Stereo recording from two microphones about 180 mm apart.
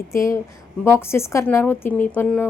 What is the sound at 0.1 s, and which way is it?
A woman's voice, 15° left (ahead or behind).